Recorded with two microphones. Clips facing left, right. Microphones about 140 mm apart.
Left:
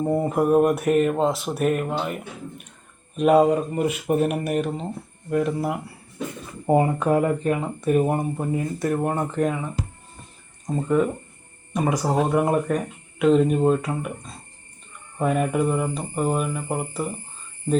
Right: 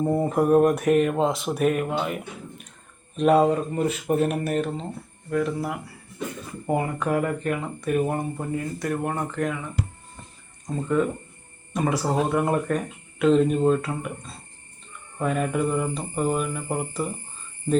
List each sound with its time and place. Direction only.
0.0 s speech: 10° left (ahead or behind)
3.2 s mantra: 10° left (ahead or behind)
5.3 s speech: 25° left (ahead or behind)
10.8 s mantra: 15° left (ahead or behind)
15.2 s mantra: 10° left (ahead or behind)